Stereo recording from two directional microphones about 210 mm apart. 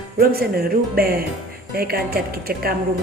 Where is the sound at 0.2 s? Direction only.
45° right (ahead or behind).